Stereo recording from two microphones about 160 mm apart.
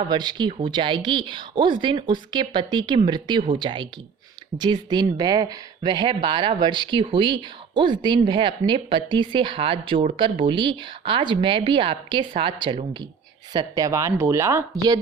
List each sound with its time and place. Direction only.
0.1 s speech: 30° right (ahead or behind)